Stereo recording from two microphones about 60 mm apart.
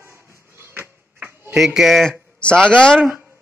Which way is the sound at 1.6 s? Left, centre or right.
Centre.